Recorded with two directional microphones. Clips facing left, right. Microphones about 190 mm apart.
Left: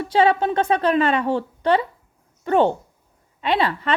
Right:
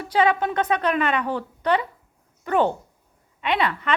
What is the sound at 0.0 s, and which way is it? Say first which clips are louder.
A woman's voice: left 3 dB; 30° left (ahead or behind).